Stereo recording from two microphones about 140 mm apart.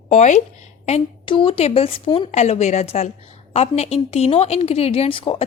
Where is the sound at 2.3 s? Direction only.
55° left (ahead or behind).